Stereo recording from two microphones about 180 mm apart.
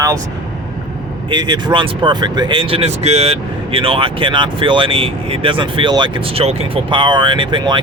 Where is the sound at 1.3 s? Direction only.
25° right (ahead or behind).